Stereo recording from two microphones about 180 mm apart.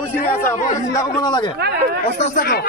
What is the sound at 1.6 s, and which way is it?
Speech, 65° right (ahead or behind).